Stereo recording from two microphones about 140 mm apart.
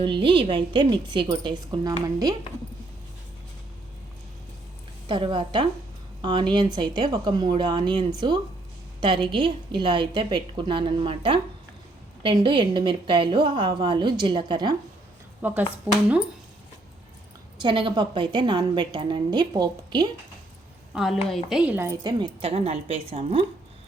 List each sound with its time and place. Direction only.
0.0 s a woman's voice: 35° right (ahead or behind)
5.0 s a woman's voice: 35° right (ahead or behind)
15.4 s a woman's voice: 15° right (ahead or behind)
17.6 s a woman's voice: 35° right (ahead or behind)
20.9 s a woman's voice: centre (ahead or behind)
21.6 s a woman's voice: 10° right (ahead or behind)
21.8 s a woman's voice: 30° right (ahead or behind)
22.4 s a woman's voice: 45° right (ahead or behind)